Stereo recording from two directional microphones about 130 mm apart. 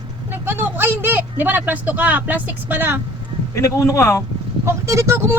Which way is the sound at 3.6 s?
20° left (ahead or behind).